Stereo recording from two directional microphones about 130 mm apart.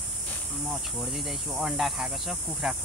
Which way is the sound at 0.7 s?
Centre (ahead or behind).